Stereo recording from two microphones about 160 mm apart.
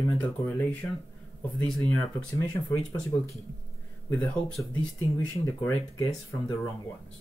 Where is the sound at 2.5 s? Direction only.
20° left (ahead or behind).